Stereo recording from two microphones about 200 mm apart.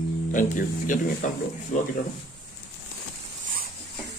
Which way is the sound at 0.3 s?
40° left (ahead or behind).